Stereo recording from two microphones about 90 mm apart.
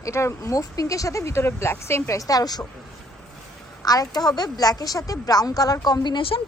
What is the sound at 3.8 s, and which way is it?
A woman's voice, 45° left (ahead or behind).